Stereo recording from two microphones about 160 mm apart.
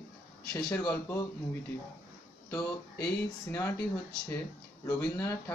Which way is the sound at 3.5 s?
15° left (ahead or behind).